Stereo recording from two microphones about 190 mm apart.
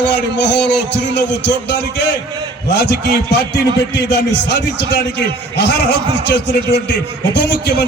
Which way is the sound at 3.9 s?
65° left (ahead or behind).